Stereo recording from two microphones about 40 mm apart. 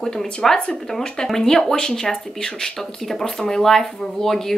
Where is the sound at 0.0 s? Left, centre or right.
Centre.